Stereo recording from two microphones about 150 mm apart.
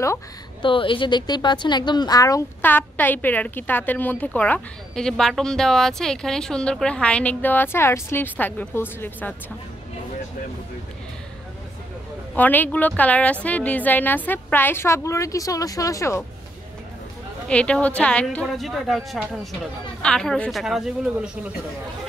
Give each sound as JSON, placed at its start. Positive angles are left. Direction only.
{"t": 0.6, "sound": "speech", "side_deg": 35}
{"t": 2.6, "sound": "speech", "side_deg": 10}
{"t": 12.4, "sound": "speech", "side_deg": 10}
{"t": 17.5, "sound": "a woman's voice", "side_deg": 10}